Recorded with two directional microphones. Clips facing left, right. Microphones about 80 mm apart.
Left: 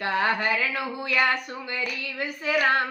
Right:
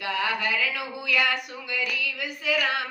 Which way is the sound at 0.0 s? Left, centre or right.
Left.